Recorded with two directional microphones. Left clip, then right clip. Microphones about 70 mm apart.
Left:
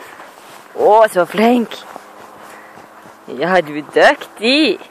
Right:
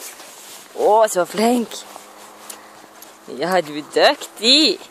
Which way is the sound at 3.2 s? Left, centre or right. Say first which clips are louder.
Left 5 dB; centre.